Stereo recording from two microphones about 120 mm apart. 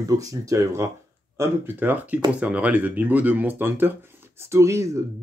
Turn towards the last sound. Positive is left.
turn(degrees=-25)  # may be behind; listen again after turning